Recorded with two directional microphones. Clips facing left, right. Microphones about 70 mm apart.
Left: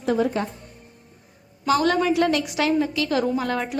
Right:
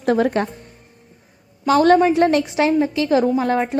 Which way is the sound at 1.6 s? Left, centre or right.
Right.